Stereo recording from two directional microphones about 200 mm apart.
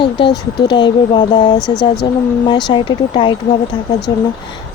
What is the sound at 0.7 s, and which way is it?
Speech, 20° left (ahead or behind).